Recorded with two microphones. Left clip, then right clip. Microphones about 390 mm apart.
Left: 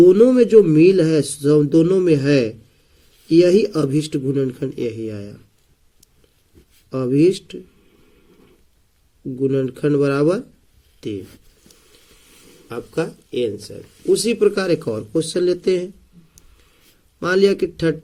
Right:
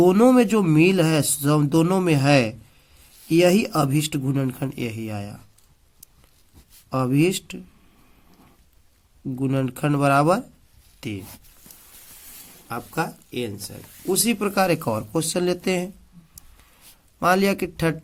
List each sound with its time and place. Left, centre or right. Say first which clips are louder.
0.0 s speech: left 5 dB; right
6.9 s speech: left 5 dB; right
9.4 s speech: left 6 dB; right
12.6 s speech: left 3 dB; right
17.2 s speech: left 4 dB; right